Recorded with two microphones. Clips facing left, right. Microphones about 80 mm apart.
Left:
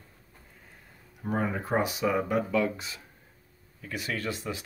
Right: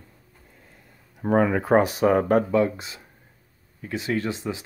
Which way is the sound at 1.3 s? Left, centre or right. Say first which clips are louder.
Right 10 dB; right.